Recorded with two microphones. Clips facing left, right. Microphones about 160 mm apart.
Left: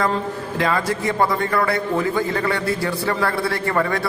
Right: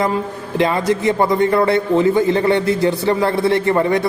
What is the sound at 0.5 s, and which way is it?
A man's voice, 20° right (ahead or behind).